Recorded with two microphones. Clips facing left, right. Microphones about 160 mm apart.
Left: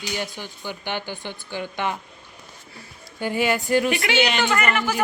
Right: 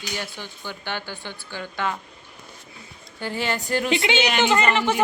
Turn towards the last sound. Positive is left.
turn(degrees=-25)  # may be behind; listen again after turning